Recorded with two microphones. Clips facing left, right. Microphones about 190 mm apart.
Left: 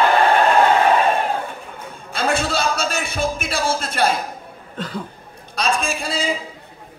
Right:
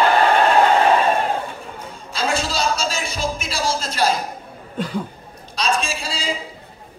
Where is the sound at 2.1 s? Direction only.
55° left (ahead or behind).